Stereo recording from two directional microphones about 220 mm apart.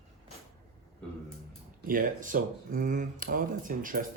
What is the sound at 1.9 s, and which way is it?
Speech, 40° right (ahead or behind).